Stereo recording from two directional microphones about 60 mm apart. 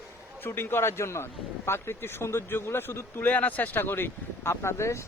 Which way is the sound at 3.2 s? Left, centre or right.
Left.